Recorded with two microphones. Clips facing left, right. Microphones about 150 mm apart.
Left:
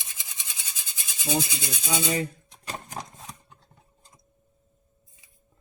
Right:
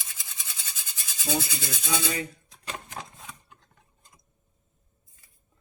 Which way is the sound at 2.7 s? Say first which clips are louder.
Left 2 dB; 40° left (ahead or behind).